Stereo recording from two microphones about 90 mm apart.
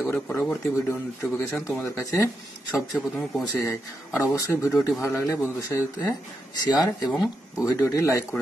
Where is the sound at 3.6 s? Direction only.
35° left (ahead or behind).